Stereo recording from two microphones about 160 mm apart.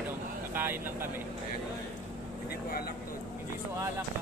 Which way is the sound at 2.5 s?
70° left (ahead or behind).